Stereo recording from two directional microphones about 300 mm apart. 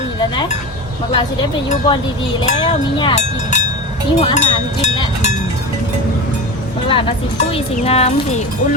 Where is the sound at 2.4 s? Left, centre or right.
Centre.